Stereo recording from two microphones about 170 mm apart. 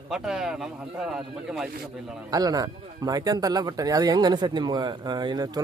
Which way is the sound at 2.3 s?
20° right (ahead or behind).